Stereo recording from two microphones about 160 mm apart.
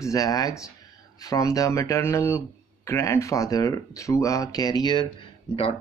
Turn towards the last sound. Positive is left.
turn(degrees=30)  # may be behind; listen again after turning